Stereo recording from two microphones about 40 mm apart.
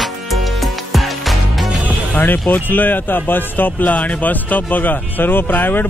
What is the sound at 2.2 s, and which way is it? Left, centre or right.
Speech, left.